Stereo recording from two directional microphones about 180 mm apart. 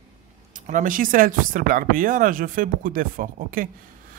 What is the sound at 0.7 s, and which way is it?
Speech, 45° right (ahead or behind).